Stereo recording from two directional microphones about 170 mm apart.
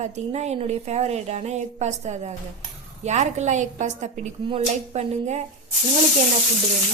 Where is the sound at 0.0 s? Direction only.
40° right (ahead or behind).